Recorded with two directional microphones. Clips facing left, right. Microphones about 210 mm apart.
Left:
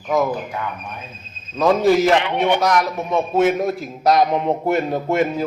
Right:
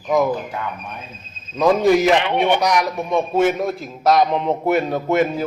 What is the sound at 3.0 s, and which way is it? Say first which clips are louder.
Speech: right 1 dB; 15° right (ahead or behind).